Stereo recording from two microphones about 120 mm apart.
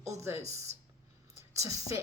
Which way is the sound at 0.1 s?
25° right (ahead or behind).